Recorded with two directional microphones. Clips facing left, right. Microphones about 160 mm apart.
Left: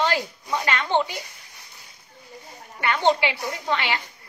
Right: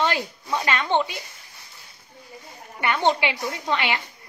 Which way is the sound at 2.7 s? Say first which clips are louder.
Left 1 dB; 20° right (ahead or behind).